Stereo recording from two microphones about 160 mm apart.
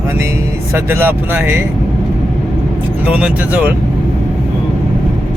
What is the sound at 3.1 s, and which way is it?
Speech, 5° right (ahead or behind).